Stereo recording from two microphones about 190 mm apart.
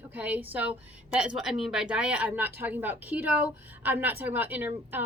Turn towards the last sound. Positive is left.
turn(degrees=-10)  # may be behind; listen again after turning